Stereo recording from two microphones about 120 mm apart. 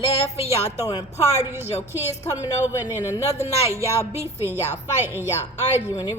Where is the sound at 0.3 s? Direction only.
25° right (ahead or behind).